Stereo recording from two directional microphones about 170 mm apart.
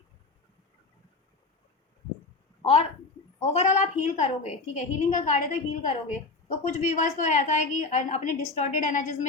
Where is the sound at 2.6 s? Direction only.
35° left (ahead or behind).